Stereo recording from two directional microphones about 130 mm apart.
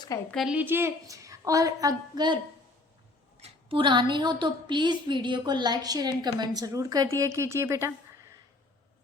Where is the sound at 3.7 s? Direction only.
40° right (ahead or behind); by 7.9 s 20° right (ahead or behind).